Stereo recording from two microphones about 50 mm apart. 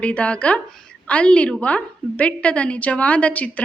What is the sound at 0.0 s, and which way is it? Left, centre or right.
A woman's voice, left.